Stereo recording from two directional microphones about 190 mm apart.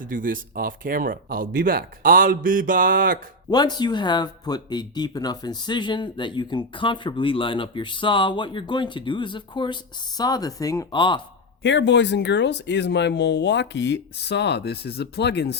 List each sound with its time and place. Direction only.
0.0 s speech: 45° right (ahead or behind)
3.5 s speech: 20° left (ahead or behind)
11.6 s speech: 70° left (ahead or behind)